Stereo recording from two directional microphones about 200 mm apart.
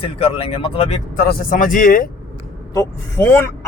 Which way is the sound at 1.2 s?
50° left (ahead or behind).